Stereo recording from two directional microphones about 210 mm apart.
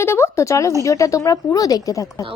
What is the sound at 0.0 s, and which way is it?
Speech, 10° left (ahead or behind).